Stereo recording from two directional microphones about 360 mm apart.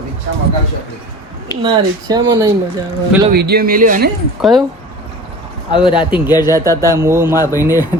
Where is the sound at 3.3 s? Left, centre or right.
Right.